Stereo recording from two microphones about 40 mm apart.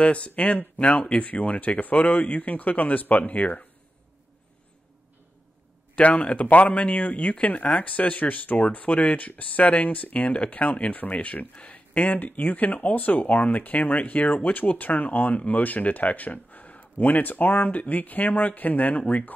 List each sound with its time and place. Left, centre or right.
0.0 s speech: left
5.9 s speech: left
7.9 s speech: left
17.6 s speech: left